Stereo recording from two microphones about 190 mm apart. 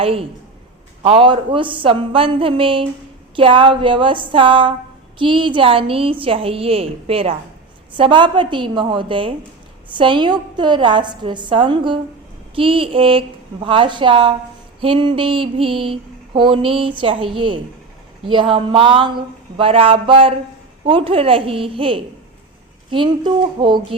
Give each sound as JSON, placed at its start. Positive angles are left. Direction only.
{"t": 0.0, "sound": "mantra", "side_deg": -30}